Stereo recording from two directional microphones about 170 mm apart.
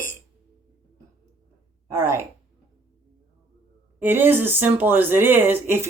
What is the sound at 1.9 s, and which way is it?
Speech, 15° right (ahead or behind).